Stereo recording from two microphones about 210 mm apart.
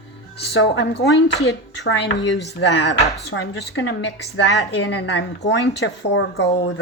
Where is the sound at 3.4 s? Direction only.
70° left (ahead or behind).